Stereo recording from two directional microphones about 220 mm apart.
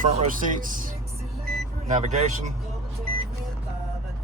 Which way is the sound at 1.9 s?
35° right (ahead or behind).